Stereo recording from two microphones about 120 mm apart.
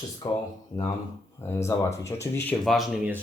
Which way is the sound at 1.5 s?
25° left (ahead or behind).